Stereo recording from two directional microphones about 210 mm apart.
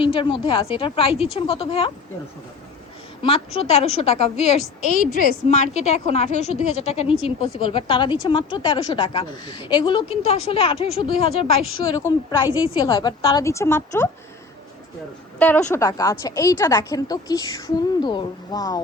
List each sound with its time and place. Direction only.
0.0 s a woman's voice: 25° left (ahead or behind)
3.2 s a woman's voice: 30° left (ahead or behind)
11.9 s a woman's voice: 15° left (ahead or behind)
15.4 s a woman's voice: 10° left (ahead or behind)